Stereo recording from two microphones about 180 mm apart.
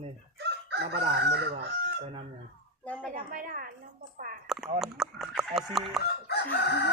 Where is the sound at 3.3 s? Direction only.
50° right (ahead or behind).